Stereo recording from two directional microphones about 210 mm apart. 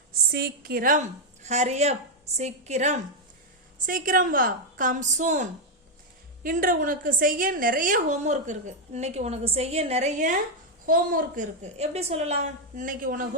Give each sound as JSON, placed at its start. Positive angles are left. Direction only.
{"t": 0.3, "sound": "a woman's voice", "side_deg": -50}